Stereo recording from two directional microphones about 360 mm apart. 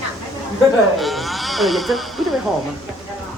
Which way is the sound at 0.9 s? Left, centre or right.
Centre.